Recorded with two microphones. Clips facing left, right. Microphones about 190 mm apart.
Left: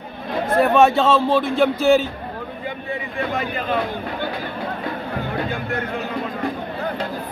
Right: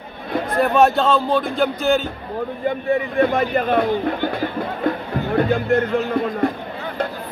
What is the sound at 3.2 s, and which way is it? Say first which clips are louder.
A man's voice: right 5 dB; 55° right (ahead or behind).